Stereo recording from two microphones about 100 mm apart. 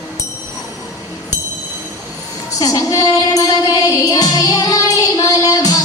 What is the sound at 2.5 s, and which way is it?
Music, 40° left (ahead or behind).